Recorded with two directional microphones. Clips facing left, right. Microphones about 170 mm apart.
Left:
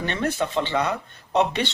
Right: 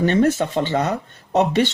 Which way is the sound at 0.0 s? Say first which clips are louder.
Right 8 dB; 45° right (ahead or behind).